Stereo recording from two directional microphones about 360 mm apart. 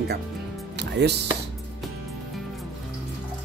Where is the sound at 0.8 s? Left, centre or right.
Right.